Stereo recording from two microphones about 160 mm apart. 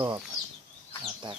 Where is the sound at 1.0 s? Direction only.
30° right (ahead or behind).